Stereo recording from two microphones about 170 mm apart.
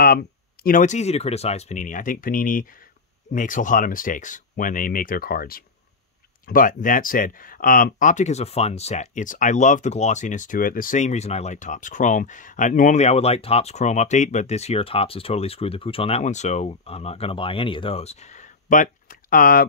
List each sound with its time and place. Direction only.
0.0 s speech: 60° left (ahead or behind)